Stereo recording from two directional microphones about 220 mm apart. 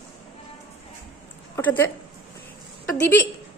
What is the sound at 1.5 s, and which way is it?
A woman's voice, 10° left (ahead or behind).